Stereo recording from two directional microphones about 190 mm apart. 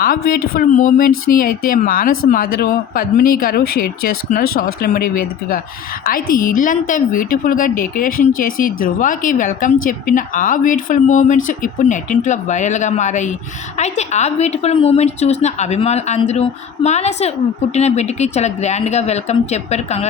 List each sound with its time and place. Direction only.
0.0 s a woman's voice: 50° left (ahead or behind); by 20.1 s 35° left (ahead or behind)